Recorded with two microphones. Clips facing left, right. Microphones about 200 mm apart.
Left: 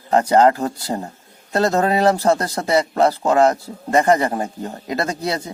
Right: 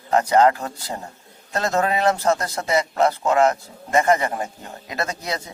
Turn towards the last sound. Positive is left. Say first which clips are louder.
# left 5 dB
turn(degrees=30)  # may be behind; listen again after turning